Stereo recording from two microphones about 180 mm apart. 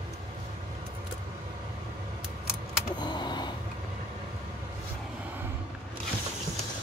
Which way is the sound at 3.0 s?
25° left (ahead or behind).